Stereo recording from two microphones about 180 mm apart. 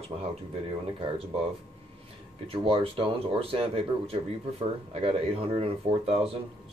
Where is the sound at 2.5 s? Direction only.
30° right (ahead or behind).